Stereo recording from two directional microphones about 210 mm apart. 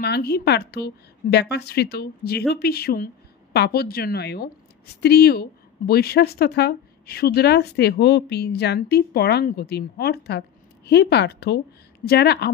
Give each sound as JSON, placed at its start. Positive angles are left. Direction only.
{"t": 0.0, "sound": "a woman's voice", "side_deg": 50}